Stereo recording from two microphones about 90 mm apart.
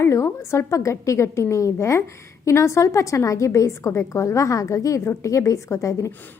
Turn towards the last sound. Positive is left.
turn(degrees=35)  # may be behind; listen again after turning